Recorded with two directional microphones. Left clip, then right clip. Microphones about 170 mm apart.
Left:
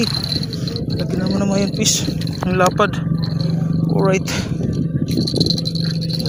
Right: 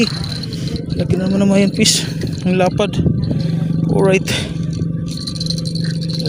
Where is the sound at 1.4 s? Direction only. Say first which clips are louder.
Right 6 dB; 50° right (ahead or behind).